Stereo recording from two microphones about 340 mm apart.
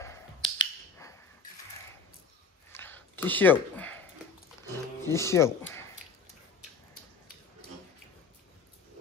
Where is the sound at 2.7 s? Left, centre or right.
Centre.